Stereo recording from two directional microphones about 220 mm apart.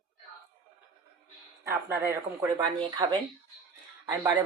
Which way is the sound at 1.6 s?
10° right (ahead or behind).